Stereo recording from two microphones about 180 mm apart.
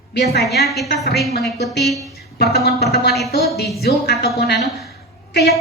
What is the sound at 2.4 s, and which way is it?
A woman's voice, 60° left (ahead or behind).